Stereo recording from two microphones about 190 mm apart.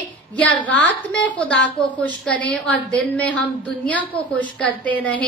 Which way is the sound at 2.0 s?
5° left (ahead or behind).